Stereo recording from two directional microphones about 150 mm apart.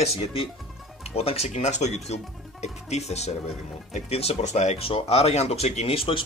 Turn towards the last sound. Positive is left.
turn(degrees=40)  # may be behind; listen again after turning